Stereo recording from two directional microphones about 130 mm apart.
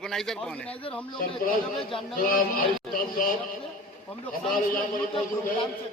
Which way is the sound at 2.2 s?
90° left.